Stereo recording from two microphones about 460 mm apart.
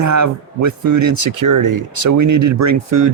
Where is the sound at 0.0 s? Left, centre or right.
Right.